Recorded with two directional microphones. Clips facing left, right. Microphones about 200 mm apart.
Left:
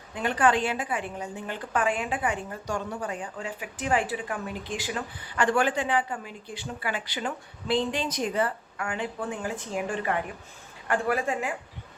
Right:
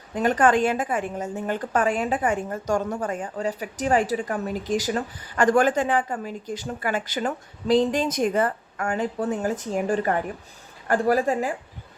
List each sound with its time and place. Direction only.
0.1 s a woman's voice: 45° right (ahead or behind)